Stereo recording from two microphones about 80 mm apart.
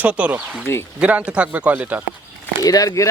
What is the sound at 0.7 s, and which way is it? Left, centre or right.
Speech, left.